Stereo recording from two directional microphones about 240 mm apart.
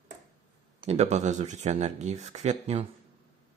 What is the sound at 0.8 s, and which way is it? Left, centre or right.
Speech, right.